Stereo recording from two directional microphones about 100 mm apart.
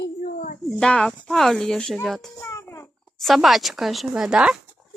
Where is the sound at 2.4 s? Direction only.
25° left (ahead or behind).